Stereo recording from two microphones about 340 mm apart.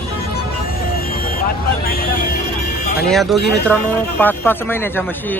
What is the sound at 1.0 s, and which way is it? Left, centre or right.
Vehicle, left.